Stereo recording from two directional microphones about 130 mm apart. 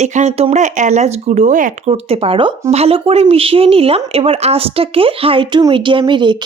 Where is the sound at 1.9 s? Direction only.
50° right (ahead or behind).